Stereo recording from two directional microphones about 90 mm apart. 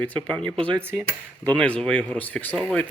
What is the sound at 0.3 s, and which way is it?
Speech, 10° left (ahead or behind).